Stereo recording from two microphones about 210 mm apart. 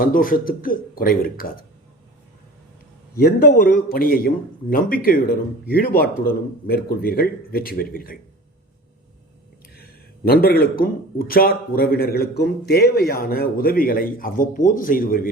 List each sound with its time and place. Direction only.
0.0 s speech: 40° left (ahead or behind)
3.2 s speech: 45° left (ahead or behind)
10.2 s speech: 45° left (ahead or behind)